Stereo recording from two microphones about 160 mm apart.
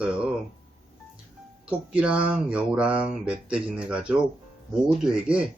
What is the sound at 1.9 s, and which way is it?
Speech, 5° right (ahead or behind).